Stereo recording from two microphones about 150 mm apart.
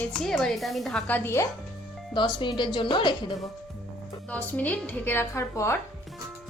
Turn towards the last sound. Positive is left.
turn(degrees=20)  # may be behind; listen again after turning